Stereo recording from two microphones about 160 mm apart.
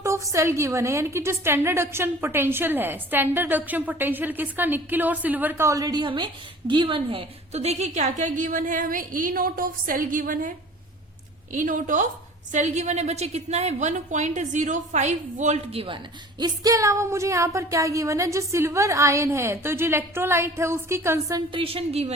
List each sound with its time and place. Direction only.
0.0 s a woman's voice: 20° right (ahead or behind); by 10.5 s 60° right (ahead or behind)
11.5 s a woman's voice: 55° right (ahead or behind); by 16.0 s 35° right (ahead or behind)
16.4 s a woman's voice: 20° right (ahead or behind)
21.5 s a woman's voice: 35° right (ahead or behind)